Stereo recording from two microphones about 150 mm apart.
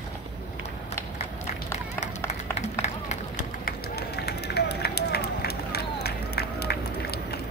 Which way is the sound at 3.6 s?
90° left.